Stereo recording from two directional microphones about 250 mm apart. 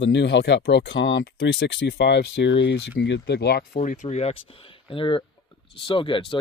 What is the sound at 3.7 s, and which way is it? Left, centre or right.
Speech, left.